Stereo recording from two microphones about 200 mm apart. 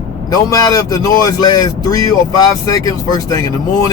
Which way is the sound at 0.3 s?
20° left (ahead or behind).